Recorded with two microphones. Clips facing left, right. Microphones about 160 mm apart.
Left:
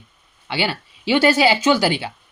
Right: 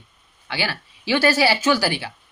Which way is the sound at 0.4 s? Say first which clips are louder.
Left 4 dB; 25° left (ahead or behind).